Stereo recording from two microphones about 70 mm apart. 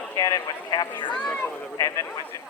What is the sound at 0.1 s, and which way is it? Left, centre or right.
Clip-clop, left.